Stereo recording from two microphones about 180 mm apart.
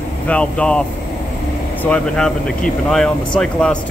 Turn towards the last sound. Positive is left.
turn(degrees=5)  # may be behind; listen again after turning